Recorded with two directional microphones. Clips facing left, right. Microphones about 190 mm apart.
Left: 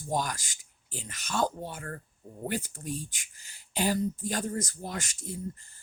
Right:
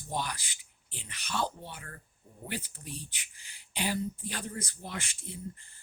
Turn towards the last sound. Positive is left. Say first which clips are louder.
# left 5 dB
turn(degrees=45)  # may be behind; listen again after turning